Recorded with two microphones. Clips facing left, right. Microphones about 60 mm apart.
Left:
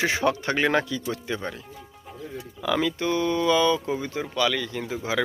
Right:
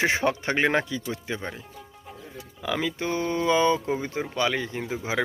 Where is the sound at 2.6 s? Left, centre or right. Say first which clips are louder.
Left 3 dB; centre.